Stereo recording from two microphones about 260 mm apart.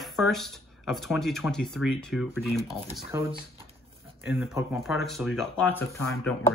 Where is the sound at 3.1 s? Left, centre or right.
Centre.